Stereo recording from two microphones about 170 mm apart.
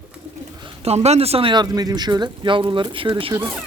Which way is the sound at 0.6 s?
35° right (ahead or behind).